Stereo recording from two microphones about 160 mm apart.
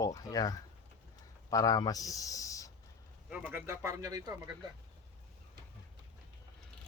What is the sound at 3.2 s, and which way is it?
Speech, 10° right (ahead or behind).